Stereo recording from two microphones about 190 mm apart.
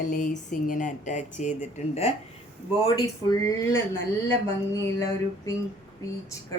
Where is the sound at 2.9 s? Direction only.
20° left (ahead or behind).